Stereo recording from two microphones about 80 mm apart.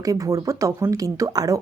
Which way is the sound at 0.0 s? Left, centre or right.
Right.